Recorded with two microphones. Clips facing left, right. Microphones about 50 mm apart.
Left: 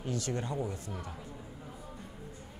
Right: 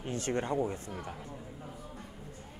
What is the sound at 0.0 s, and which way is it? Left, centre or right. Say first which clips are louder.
Speech: right 2 dB; right.